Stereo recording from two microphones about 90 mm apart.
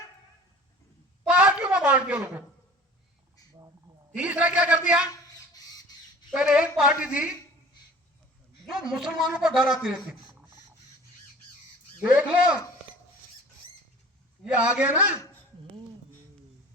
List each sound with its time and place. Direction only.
1.3 s a sound: 10° right (ahead or behind)
4.1 s a man's voice: 15° right (ahead or behind)
6.3 s a man's voice: 10° right (ahead or behind)
8.6 s a man's voice: 5° right (ahead or behind)
12.0 s a man's voice: 15° right (ahead or behind)
14.6 s a man's voice: 15° right (ahead or behind)